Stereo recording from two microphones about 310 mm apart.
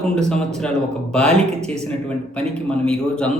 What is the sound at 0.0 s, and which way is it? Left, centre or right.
A man's voice, centre.